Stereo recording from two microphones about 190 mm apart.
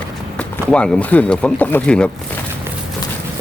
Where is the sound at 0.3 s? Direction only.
5° left (ahead or behind).